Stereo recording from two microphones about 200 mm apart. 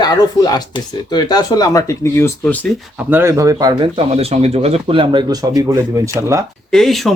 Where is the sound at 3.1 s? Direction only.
10° right (ahead or behind).